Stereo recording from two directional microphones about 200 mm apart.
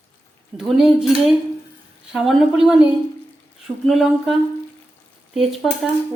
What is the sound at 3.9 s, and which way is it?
Speech, centre (ahead or behind).